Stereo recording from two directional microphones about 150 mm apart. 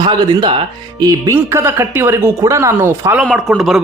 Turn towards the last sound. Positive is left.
turn(degrees=0)  # may be behind; listen again after turning